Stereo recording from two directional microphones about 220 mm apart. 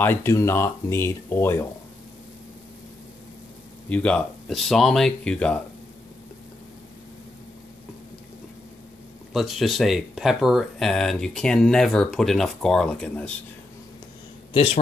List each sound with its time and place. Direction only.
0.0 s speech: 10° left (ahead or behind)
3.9 s speech: 5° left (ahead or behind)
9.3 s speech: centre (ahead or behind)
14.5 s a man's voice: 25° left (ahead or behind)